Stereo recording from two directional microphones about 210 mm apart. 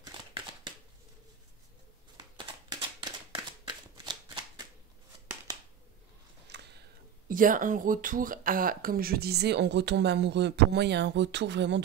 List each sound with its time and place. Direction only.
3.0 s shuffling cards: 20° right (ahead or behind)
6.5 s a sound: 55° right (ahead or behind)
7.2 s speech: 40° right (ahead or behind)